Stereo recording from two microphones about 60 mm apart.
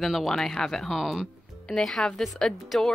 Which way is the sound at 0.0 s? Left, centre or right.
Centre.